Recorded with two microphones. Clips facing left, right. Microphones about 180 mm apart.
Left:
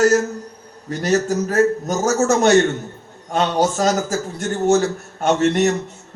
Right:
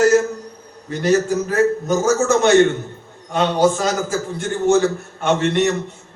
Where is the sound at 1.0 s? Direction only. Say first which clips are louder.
Right 2 dB; 40° left (ahead or behind).